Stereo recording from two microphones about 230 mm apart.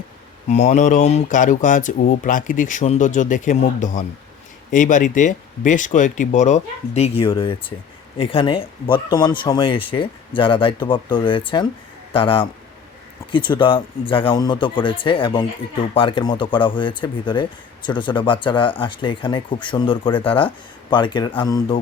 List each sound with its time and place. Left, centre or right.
0.4 s speech: left